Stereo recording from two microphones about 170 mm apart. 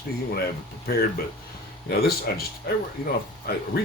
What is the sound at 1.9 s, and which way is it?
Speech, 65° left (ahead or behind).